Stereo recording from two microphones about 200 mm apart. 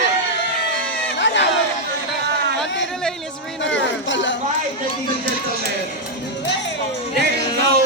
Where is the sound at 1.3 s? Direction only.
70° left (ahead or behind).